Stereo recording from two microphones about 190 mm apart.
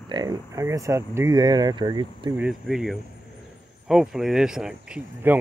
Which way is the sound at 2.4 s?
5° right (ahead or behind).